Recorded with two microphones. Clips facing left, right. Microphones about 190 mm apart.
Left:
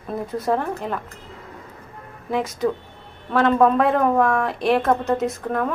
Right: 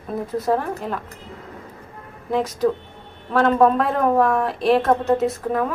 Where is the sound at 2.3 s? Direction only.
Centre (ahead or behind).